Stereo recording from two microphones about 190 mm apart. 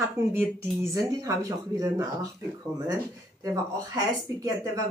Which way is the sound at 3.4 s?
15° right (ahead or behind).